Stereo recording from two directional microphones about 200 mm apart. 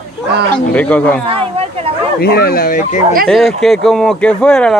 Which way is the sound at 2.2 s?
50° left (ahead or behind).